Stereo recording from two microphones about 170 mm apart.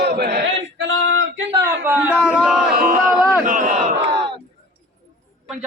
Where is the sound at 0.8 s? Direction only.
85° right.